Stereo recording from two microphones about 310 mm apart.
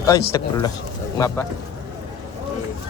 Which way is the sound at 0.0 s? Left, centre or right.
Centre.